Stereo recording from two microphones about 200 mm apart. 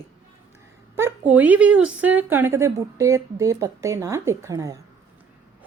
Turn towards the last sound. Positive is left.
turn(degrees=-15)  # may be behind; listen again after turning